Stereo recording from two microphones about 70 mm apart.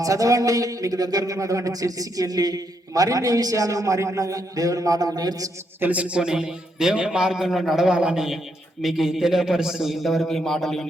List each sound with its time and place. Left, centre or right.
0.0 s speech: right
5.8 s a man's voice: centre